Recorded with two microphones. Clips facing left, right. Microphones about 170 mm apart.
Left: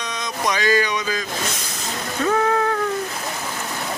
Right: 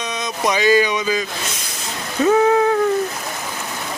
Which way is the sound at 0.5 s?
15° right (ahead or behind).